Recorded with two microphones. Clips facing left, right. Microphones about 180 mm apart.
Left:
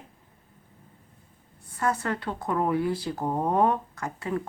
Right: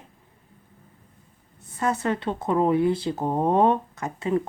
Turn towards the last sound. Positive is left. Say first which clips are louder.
# right 5 dB
turn(degrees=-20)  # may be behind; listen again after turning